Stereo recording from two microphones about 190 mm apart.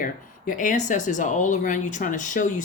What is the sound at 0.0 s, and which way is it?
Speech, 45° left (ahead or behind).